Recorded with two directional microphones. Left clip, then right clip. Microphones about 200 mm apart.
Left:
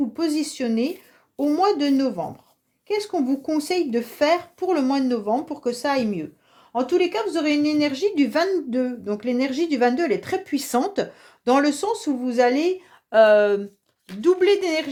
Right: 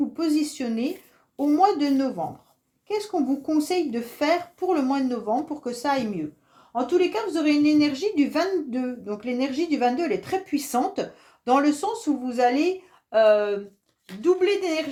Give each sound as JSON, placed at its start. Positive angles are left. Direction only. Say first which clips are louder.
{"t": 0.2, "sound": "speech", "louder": "even", "side_deg": 40}